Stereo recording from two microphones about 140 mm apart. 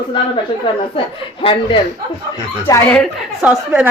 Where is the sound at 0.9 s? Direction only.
40° left (ahead or behind).